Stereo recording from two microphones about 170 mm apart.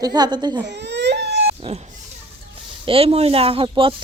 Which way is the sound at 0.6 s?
90° right.